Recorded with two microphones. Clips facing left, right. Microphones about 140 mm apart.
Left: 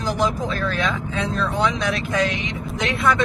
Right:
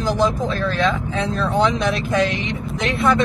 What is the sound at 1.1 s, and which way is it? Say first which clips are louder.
Speech: right 3 dB; 30° right (ahead or behind).